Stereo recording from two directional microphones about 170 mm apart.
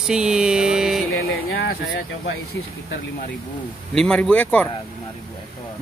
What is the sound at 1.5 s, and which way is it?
Speech, 65° left (ahead or behind).